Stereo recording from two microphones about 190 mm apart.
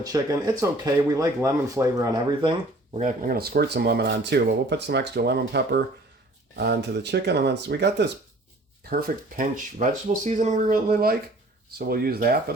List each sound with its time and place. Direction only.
0.0 s speech: 20° right (ahead or behind)
3.0 s speech: 50° right (ahead or behind)
8.8 s speech: 50° right (ahead or behind)